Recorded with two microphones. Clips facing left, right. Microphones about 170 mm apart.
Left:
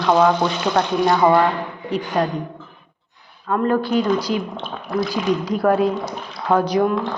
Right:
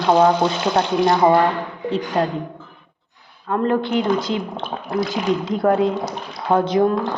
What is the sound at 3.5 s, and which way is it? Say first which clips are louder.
A woman's voice: left 1 dB; 25° right (ahead or behind).